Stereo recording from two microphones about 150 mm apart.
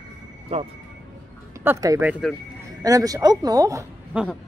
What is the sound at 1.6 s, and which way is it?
Speech, 20° right (ahead or behind).